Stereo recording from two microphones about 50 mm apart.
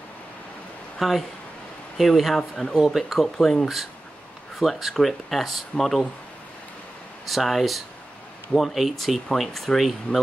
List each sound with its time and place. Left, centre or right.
0.9 s speech: centre
2.8 s speech: centre
4.6 s speech: centre
7.2 s speech: centre